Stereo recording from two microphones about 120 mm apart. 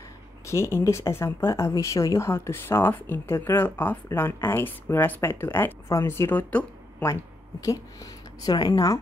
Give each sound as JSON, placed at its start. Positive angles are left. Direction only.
{"t": 0.5, "sound": "speech", "side_deg": 20}
{"t": 7.6, "sound": "speech", "side_deg": 30}